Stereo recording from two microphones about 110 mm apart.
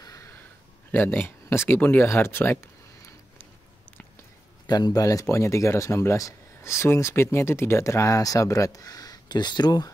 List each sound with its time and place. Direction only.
0.0 s a sound: 30° left (ahead or behind)
0.9 s speech: 20° left (ahead or behind)
4.6 s speech: 35° left (ahead or behind)